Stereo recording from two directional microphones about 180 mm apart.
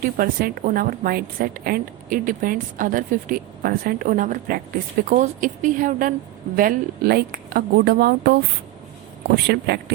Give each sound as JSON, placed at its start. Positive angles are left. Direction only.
{"t": 0.0, "sound": "a woman's voice", "side_deg": -55}